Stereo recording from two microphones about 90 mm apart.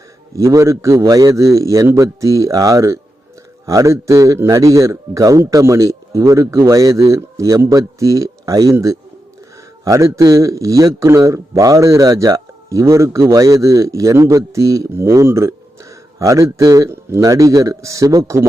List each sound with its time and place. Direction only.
0.3 s a man's voice: 35° right (ahead or behind)